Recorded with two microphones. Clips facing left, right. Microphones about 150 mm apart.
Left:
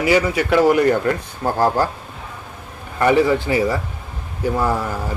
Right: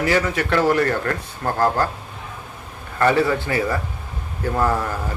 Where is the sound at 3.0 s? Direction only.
15° left (ahead or behind).